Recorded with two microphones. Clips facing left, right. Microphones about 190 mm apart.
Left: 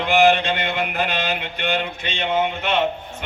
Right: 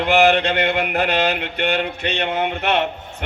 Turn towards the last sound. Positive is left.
turn(degrees=-65)  # may be behind; listen again after turning